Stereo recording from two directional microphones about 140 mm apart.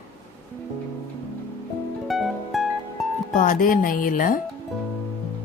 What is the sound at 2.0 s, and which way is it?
Music, centre (ahead or behind).